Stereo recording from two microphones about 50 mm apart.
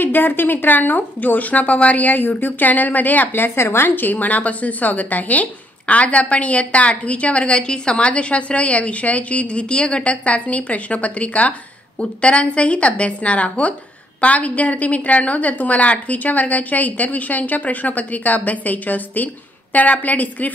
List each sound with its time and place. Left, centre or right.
0.0 s a woman's voice: left